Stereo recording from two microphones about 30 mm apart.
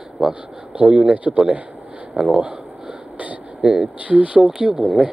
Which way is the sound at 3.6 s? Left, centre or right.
Right.